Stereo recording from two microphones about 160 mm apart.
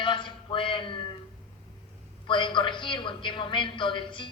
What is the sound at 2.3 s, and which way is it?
A woman's voice, 30° left (ahead or behind).